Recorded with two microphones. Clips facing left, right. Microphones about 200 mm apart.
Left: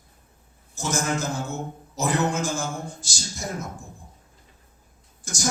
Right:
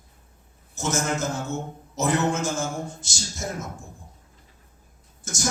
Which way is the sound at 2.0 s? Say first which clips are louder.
Right 1 dB; 25° right (ahead or behind).